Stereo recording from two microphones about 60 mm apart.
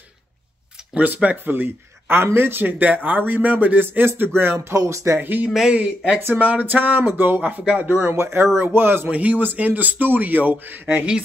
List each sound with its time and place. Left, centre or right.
0.9 s speech: right
4.7 s speech: right
5.2 s speech: right
5.7 s speech: centre
8.1 s speech: right
9.1 s speech: right